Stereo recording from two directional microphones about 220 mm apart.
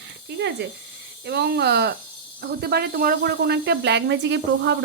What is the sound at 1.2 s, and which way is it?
Speech, 50° right (ahead or behind).